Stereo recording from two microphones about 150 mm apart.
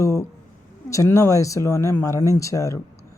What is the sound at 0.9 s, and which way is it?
Speech, 20° left (ahead or behind).